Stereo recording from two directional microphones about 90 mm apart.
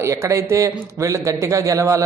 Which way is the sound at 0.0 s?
30° right (ahead or behind).